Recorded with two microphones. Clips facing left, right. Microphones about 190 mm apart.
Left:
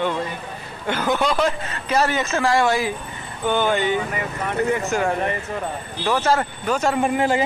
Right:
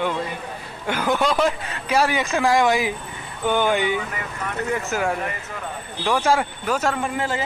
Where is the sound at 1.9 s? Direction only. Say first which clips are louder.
Even; 10° right (ahead or behind).